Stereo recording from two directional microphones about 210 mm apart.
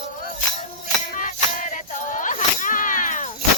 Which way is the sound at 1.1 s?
35° left (ahead or behind).